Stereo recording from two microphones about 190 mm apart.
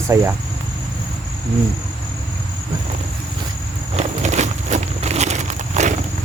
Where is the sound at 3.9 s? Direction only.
35° right (ahead or behind).